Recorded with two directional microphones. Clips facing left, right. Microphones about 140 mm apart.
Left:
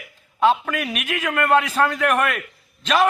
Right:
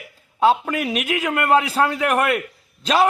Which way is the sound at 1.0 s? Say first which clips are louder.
Left 2 dB; 15° right (ahead or behind).